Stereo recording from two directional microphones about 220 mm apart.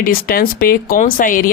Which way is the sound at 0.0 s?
40° left (ahead or behind).